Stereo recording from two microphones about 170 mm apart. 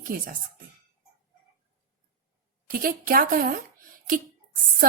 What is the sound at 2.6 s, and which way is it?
Speech, 60° right (ahead or behind).